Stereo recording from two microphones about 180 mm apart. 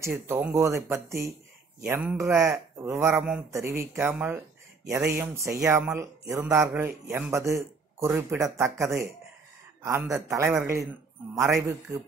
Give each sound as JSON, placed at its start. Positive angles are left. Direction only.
{"t": 0.0, "sound": "speech", "side_deg": -15}
{"t": 8.8, "sound": "speech", "side_deg": 0}
{"t": 9.8, "sound": "a man's voice", "side_deg": -15}